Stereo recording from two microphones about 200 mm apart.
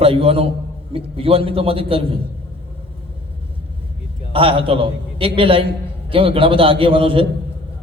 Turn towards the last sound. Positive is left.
turn(degrees=-25)  # may be behind; listen again after turning